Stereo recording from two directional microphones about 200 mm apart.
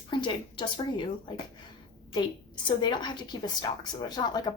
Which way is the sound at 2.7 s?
20° left (ahead or behind).